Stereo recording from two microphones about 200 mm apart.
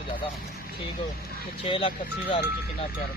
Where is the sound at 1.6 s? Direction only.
25° left (ahead or behind).